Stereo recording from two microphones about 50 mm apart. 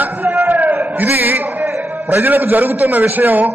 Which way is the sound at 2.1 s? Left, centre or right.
Right.